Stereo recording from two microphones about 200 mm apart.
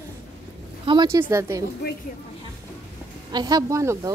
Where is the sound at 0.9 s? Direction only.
20° right (ahead or behind).